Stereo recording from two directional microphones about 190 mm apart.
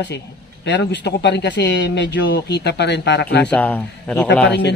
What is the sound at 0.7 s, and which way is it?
Speech, 65° left (ahead or behind).